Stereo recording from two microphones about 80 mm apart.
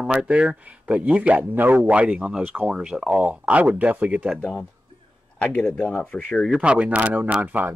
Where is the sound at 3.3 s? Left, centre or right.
Centre.